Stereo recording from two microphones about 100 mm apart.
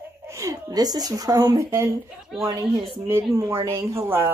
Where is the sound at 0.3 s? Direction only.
30° right (ahead or behind).